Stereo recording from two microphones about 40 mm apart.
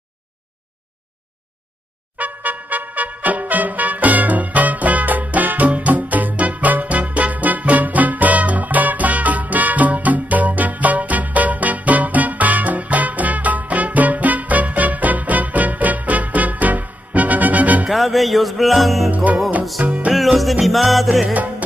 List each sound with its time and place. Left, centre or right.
2.1 s music: right
17.8 s music: centre
19.0 s music: right
20.6 s music: centre
21.3 s music: right